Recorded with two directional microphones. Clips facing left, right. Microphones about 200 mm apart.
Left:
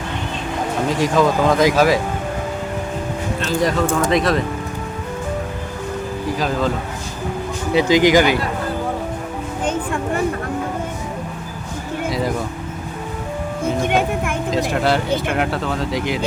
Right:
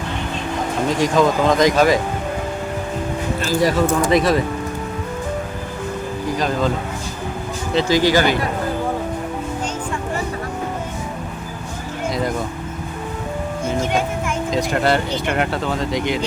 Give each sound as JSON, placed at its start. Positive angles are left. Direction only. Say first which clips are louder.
{"t": 0.9, "sound": "speech", "louder": "even", "side_deg": 5}
{"t": 3.5, "sound": "speech", "louder": "right 1 dB", "side_deg": -5}
{"t": 6.3, "sound": "speech", "louder": "right 1 dB", "side_deg": 5}
{"t": 7.7, "sound": "speech", "louder": "left 3 dB", "side_deg": 15}
{"t": 12.0, "sound": "a sound", "louder": "even", "side_deg": 5}
{"t": 13.8, "sound": "music", "louder": "left 2 dB", "side_deg": 60}
{"t": 14.5, "sound": "speech", "louder": "even", "side_deg": 0}